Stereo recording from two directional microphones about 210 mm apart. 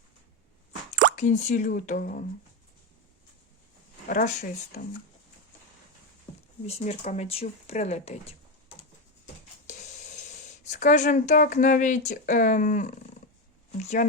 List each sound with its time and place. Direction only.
1.1 s speech: 35° left (ahead or behind)
4.1 s speech: 35° left (ahead or behind)
6.7 s speech: 30° left (ahead or behind)
10.7 s speech: 35° left (ahead or behind)